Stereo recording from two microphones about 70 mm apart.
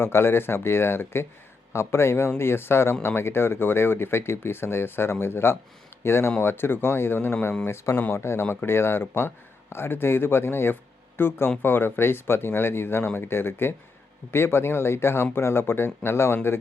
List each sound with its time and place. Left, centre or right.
0.0 s speech: left